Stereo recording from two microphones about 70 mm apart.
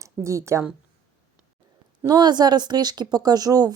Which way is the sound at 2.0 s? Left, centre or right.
Right.